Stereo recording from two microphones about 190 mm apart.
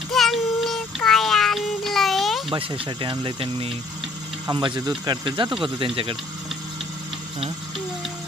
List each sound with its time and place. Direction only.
0.1 s child singing: centre (ahead or behind)
2.5 s speech: 30° right (ahead or behind)